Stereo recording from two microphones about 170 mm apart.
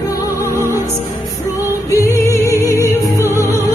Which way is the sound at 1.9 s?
15° left (ahead or behind).